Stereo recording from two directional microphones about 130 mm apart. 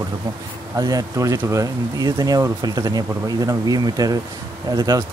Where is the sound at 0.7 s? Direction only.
25° right (ahead or behind).